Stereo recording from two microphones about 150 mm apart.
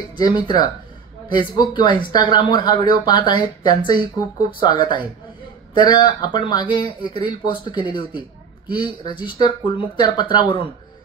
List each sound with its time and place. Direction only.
0.2 s speech: 30° left (ahead or behind)